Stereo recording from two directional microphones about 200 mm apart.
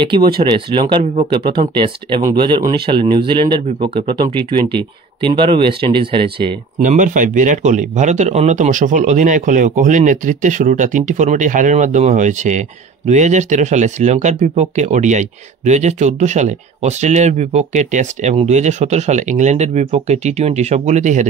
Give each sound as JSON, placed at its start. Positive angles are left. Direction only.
{"t": 0.0, "sound": "speech", "side_deg": -25}
{"t": 6.8, "sound": "speech", "side_deg": -40}